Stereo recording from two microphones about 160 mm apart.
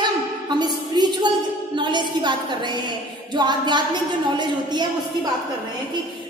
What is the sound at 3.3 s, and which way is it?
A woman's voice, 30° right (ahead or behind).